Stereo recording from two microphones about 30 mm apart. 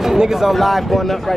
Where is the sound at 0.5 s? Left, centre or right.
Centre.